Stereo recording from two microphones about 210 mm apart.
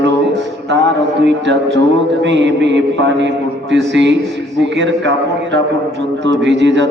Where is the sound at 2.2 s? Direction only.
60° right (ahead or behind).